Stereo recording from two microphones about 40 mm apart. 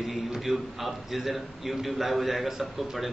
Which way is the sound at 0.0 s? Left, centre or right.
Centre.